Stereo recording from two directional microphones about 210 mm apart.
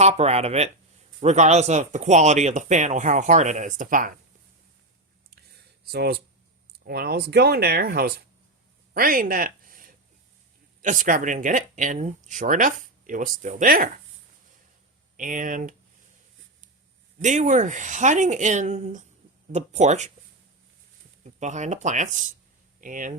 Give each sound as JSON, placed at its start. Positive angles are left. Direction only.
{"t": 0.0, "sound": "speech", "side_deg": -30}
{"t": 5.9, "sound": "speech", "side_deg": -50}
{"t": 8.9, "sound": "a sound", "side_deg": -45}
{"t": 10.8, "sound": "speech", "side_deg": -40}
{"t": 15.1, "sound": "speech", "side_deg": -40}
{"t": 17.2, "sound": "speech", "side_deg": -35}
{"t": 21.2, "sound": "speech", "side_deg": -35}